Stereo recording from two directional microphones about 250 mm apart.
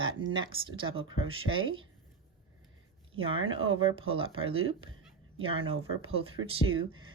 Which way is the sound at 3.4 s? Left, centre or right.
Right.